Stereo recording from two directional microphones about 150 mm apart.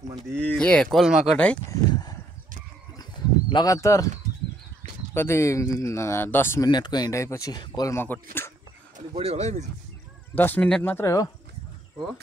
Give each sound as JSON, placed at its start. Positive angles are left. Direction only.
{"t": 0.3, "sound": "speech", "side_deg": -15}
{"t": 0.6, "sound": "speech", "side_deg": 5}
{"t": 3.0, "sound": "a sound", "side_deg": 30}
{"t": 5.1, "sound": "speech", "side_deg": 15}
{"t": 6.7, "sound": "speech", "side_deg": 30}
{"t": 7.9, "sound": "speech", "side_deg": 15}
{"t": 9.1, "sound": "speech", "side_deg": -40}
{"t": 10.3, "sound": "speech", "side_deg": 10}